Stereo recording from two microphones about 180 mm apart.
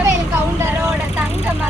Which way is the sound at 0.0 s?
15° right (ahead or behind).